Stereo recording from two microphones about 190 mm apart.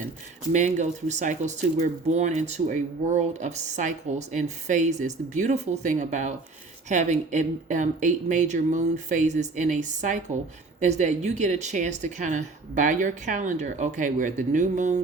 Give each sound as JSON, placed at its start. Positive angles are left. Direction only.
{"t": 0.5, "sound": "speech", "side_deg": -40}